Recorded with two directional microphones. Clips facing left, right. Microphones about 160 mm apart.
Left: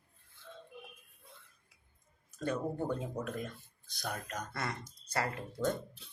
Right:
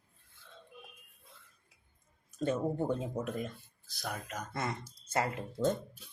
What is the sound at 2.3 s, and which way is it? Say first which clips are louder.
Speech: right 3 dB; 20° right (ahead or behind).